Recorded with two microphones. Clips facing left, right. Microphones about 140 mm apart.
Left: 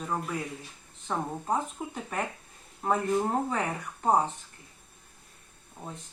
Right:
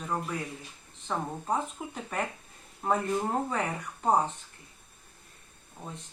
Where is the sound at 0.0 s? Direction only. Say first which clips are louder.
Left 1 dB; 5° left (ahead or behind).